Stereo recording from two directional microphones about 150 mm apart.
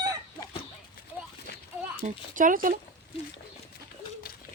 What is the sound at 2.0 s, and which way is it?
Speech, 60° right (ahead or behind).